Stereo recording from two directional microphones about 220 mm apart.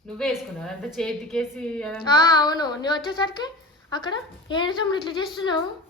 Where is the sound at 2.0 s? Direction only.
20° left (ahead or behind).